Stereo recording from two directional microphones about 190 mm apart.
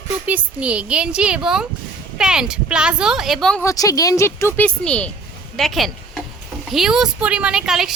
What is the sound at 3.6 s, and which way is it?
Speech, 20° left (ahead or behind).